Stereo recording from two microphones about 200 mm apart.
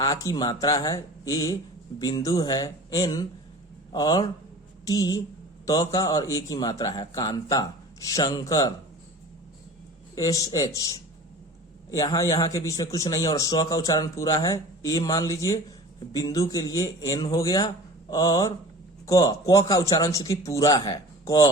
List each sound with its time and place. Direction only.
0.0 s a man's voice: 20° left (ahead or behind)
10.2 s a man's voice: 15° left (ahead or behind)
11.9 s a man's voice: 20° left (ahead or behind)